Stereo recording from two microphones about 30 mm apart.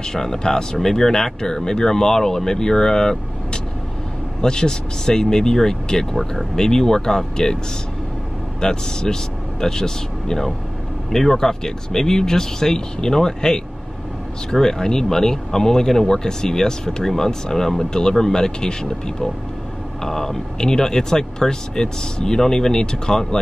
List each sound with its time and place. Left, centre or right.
0.0 s speech: centre
4.4 s speech: left
8.5 s speech: left
17.8 s speech: left
20.0 s speech: centre
20.5 s speech: left